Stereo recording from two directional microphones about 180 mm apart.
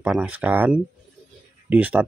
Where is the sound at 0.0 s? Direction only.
10° right (ahead or behind).